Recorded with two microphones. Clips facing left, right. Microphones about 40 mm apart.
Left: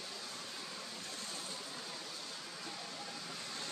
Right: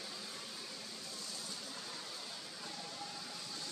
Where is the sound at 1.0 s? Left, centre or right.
Left.